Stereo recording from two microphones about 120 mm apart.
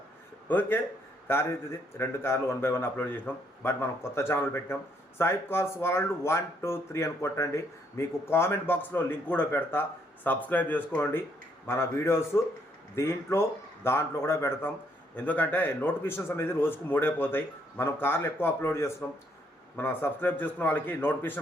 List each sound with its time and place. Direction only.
0.4 s a man's voice: 15° left (ahead or behind)